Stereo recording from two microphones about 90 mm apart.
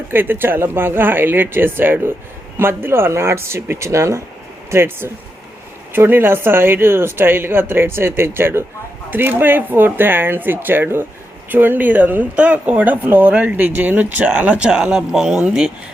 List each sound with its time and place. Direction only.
0.1 s speech: 25° right (ahead or behind); by 15.7 s 5° right (ahead or behind)